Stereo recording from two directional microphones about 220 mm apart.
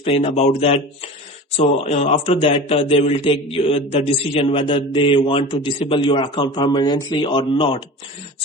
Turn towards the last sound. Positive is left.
turn(degrees=25)  # may be behind; listen again after turning